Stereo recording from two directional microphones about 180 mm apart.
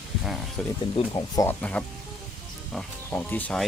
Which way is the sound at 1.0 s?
35° left (ahead or behind).